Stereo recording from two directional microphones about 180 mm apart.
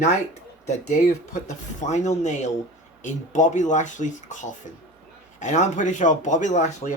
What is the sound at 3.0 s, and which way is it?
Speech, 45° left (ahead or behind).